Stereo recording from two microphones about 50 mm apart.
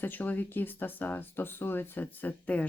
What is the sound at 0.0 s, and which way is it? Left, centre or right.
Speech, left.